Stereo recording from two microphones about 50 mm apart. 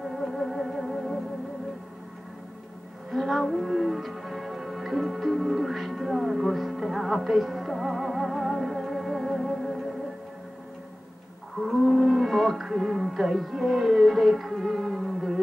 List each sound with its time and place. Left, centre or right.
0.0 s music: centre
3.1 s music: centre
11.9 s music: centre